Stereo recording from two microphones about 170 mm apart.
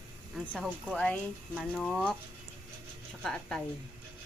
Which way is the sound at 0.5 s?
5° right (ahead or behind).